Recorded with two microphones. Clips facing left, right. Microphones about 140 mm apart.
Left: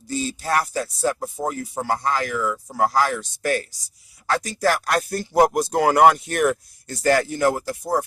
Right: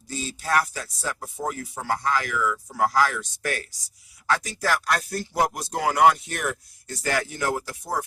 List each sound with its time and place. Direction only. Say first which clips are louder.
0.4 s speech: even; 35° left (ahead or behind)
4.3 s speech: left 4 dB; 45° left (ahead or behind)